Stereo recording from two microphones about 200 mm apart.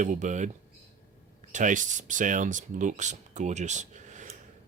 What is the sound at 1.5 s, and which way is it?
Speech, 40° right (ahead or behind).